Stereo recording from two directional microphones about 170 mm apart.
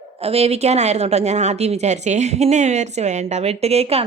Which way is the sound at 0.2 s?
35° right (ahead or behind).